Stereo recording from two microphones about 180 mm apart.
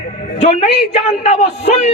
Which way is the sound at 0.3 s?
35° left (ahead or behind).